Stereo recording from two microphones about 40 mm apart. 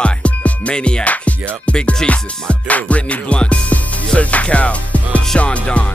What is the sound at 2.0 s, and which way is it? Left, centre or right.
Music, centre.